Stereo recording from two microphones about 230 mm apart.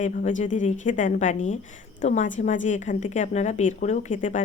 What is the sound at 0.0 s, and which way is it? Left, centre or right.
A woman's voice, left.